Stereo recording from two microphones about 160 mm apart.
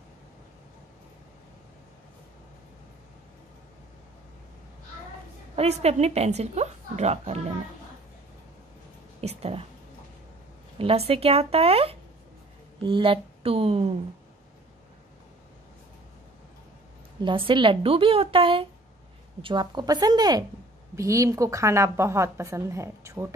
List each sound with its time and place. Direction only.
5.6 s a woman's voice: 40° right (ahead or behind)
9.2 s a woman's voice: 40° right (ahead or behind)
10.8 s a woman's voice: 35° right (ahead or behind)
17.2 s a woman's voice: 30° right (ahead or behind); by 23.3 s 15° right (ahead or behind)